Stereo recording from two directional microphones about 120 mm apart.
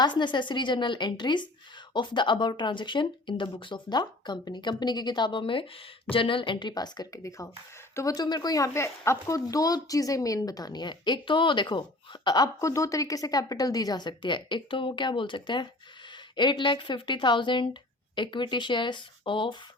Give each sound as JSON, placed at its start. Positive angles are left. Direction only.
{"t": 0.0, "sound": "speech", "side_deg": 40}